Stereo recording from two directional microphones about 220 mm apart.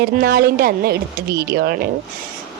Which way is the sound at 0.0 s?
45° right (ahead or behind).